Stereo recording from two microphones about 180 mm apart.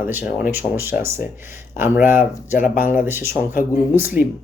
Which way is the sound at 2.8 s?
50° left (ahead or behind).